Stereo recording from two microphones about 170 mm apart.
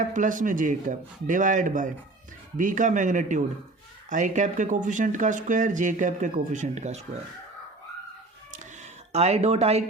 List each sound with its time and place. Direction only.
0.0 s speech: 50° right (ahead or behind)
9.1 s speech: 40° right (ahead or behind)